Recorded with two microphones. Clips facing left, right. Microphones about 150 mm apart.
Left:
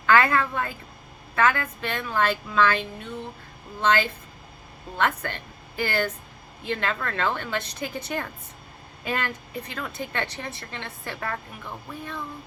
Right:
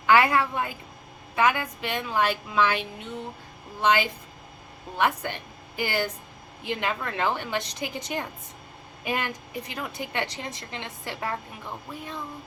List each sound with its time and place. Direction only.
0.0 s a woman's voice: 15° right (ahead or behind)